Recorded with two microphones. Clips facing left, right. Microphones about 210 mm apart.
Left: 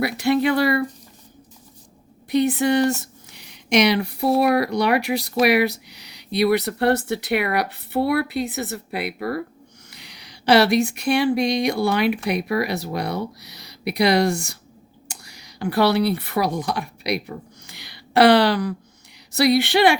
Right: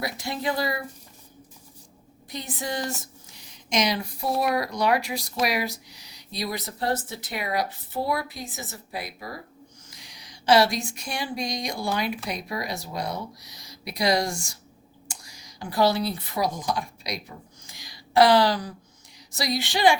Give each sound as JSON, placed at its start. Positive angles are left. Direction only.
{"t": 0.0, "sound": "speech", "side_deg": 70}
{"t": 2.3, "sound": "speech", "side_deg": 65}